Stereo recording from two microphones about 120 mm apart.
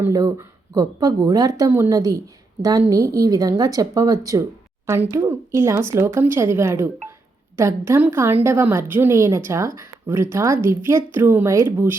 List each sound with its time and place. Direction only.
0.1 s speech: 30° right (ahead or behind)